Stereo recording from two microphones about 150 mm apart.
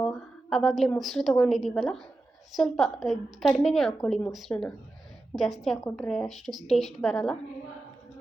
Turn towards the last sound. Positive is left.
turn(degrees=5)  # may be behind; listen again after turning